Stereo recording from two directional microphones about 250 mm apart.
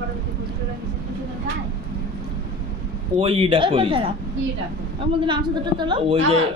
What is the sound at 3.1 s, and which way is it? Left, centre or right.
Speech, right.